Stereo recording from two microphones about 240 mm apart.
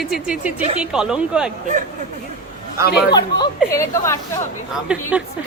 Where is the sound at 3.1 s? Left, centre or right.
Centre.